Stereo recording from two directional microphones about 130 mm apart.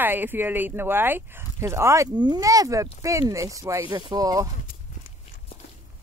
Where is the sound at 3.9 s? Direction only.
35° right (ahead or behind).